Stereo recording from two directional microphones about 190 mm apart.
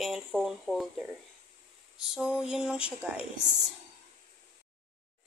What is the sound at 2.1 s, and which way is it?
Speech, 5° right (ahead or behind).